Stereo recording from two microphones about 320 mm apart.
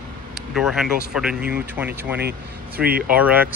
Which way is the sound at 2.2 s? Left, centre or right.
Right.